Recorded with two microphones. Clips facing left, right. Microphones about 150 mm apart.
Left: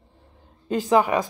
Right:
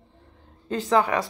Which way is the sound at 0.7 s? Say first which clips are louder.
Left 2 dB; 15° left (ahead or behind).